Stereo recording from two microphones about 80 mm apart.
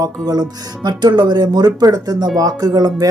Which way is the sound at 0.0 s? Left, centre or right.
Right.